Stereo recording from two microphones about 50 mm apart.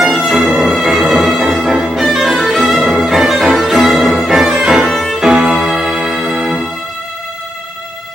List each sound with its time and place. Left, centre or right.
0.2 s music: centre
4.9 s violin: centre
5.6 s music: centre